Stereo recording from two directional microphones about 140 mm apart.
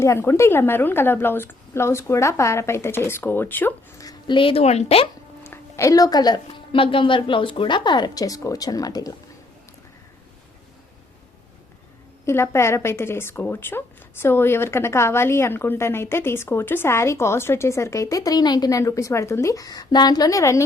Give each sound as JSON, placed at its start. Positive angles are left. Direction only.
{"t": 0.0, "sound": "a woman's voice", "side_deg": 20}
{"t": 4.0, "sound": "speech", "side_deg": 35}
{"t": 5.5, "sound": "speech", "side_deg": 20}
{"t": 12.2, "sound": "speech", "side_deg": 20}